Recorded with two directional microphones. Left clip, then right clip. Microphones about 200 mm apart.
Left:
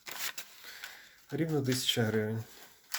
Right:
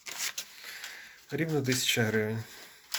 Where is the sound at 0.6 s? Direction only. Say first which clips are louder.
Right 4 dB; 10° left (ahead or behind).